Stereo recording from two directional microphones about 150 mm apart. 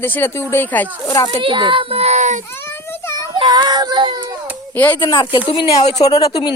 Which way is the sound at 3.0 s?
20° left (ahead or behind).